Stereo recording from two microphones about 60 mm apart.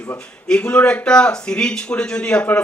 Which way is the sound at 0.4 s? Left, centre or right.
Centre.